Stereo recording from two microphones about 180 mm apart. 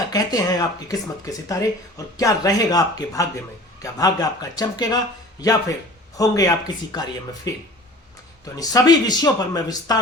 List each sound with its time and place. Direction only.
0.1 s speech: 20° left (ahead or behind)